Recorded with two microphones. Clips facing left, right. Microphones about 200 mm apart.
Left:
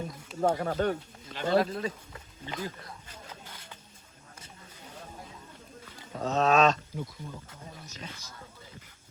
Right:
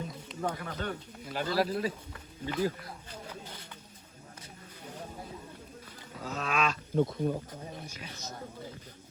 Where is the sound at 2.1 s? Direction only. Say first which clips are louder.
Right 4 dB; 25° left (ahead or behind).